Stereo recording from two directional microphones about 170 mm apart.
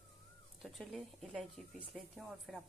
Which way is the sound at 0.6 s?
Centre (ahead or behind).